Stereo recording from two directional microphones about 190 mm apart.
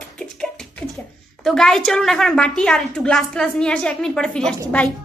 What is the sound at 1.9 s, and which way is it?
A woman's voice, centre (ahead or behind).